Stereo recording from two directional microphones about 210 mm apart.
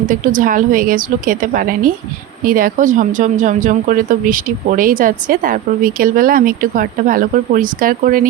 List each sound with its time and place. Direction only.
0.1 s speech: 40° right (ahead or behind)